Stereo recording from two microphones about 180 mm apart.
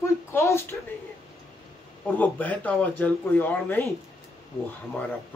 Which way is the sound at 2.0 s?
10° left (ahead or behind).